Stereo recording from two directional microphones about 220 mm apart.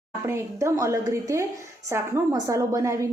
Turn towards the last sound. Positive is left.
turn(degrees=-15)  # may be behind; listen again after turning